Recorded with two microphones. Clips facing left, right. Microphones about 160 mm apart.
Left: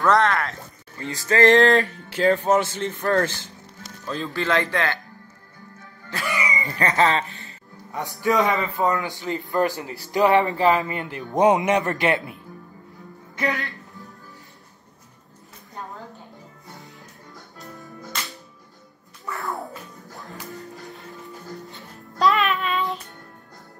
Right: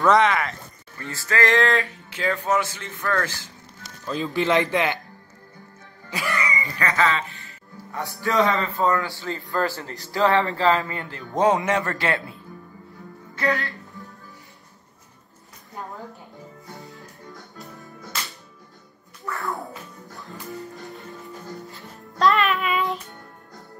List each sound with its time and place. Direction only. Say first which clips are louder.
0.0 s speech: right 1 dB; centre (ahead or behind)
0.9 s a man's voice: left 4 dB; 20° left (ahead or behind)
1.4 s music: left 5 dB; 35° left (ahead or behind)
2.6 s a man's voice: left 5 dB; 20° left (ahead or behind)
3.1 s music: left 4 dB; 30° left (ahead or behind)
4.0 s speech: right 2 dB; centre (ahead or behind)
4.3 s speech: right 2 dB; 20° right (ahead or behind)
6.6 s music: left 4 dB; 35° left (ahead or behind)
7.4 s speech: right 1 dB; 20° left (ahead or behind)
13.4 s a man's voice: right 2 dB; 20° left (ahead or behind)
19.4 s music: left 1 dB; centre (ahead or behind)